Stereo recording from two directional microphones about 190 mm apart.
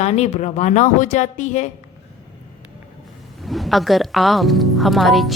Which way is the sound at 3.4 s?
Centre (ahead or behind).